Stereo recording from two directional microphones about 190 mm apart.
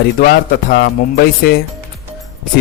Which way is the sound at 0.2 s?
55° left (ahead or behind).